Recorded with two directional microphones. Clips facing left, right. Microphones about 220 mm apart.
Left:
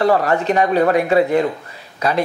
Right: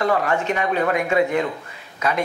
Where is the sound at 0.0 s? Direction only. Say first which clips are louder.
Left 5 dB; 35° left (ahead or behind).